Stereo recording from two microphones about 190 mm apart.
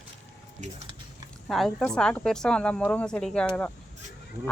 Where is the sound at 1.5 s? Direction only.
Centre (ahead or behind).